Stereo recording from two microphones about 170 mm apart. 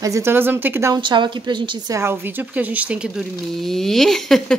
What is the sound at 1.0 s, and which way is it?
A woman's voice, 30° right (ahead or behind).